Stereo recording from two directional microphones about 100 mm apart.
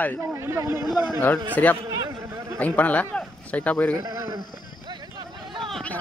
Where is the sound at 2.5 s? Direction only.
15° left (ahead or behind).